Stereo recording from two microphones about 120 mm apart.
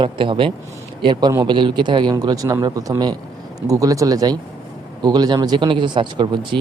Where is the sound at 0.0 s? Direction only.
45° right (ahead or behind).